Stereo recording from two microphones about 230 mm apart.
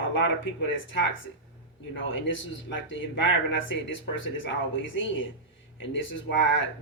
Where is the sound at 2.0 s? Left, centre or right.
Left.